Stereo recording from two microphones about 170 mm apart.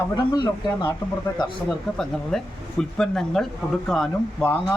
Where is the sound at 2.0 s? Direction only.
5° left (ahead or behind).